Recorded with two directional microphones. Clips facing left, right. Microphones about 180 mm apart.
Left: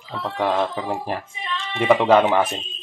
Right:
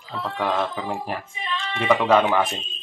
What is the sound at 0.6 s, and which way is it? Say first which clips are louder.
Speech: left 3 dB; 25° left (ahead or behind).